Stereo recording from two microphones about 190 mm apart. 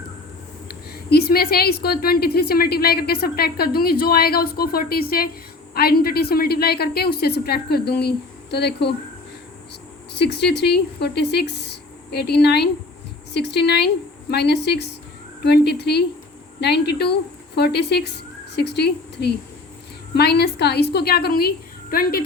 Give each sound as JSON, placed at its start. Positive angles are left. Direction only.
{"t": 1.1, "sound": "a woman's voice", "side_deg": 55}
{"t": 10.2, "sound": "a woman's voice", "side_deg": 60}